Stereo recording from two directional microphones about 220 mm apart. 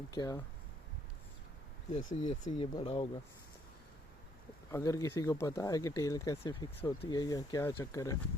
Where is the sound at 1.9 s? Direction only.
35° left (ahead or behind).